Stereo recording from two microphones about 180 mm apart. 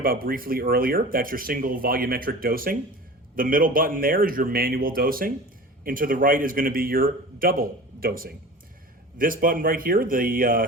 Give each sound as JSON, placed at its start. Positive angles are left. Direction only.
{"t": 0.0, "sound": "speech", "side_deg": -55}